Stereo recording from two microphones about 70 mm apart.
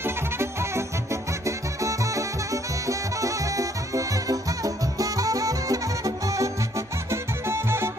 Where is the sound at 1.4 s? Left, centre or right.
Right.